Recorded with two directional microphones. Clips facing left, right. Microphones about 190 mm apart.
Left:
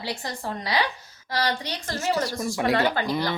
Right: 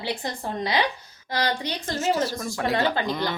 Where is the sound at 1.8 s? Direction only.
20° right (ahead or behind).